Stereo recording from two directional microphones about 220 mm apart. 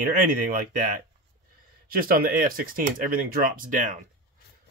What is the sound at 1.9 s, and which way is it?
Speech, 40° right (ahead or behind).